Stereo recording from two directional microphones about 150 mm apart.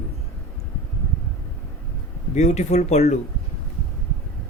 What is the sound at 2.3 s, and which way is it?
Speech, 50° left (ahead or behind).